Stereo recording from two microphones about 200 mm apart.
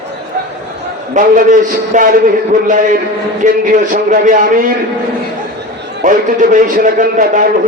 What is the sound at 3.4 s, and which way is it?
Speech, 35° right (ahead or behind).